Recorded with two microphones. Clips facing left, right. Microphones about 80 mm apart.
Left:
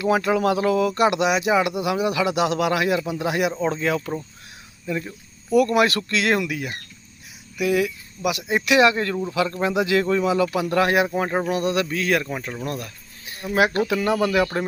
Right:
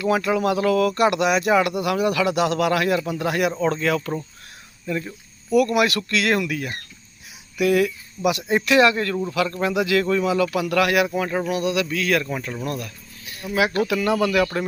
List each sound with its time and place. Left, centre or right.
0.1 s speech: left
5.5 s speech: left
7.6 s speech: centre
12.6 s a sound: left
13.6 s speech: left
13.9 s speech: left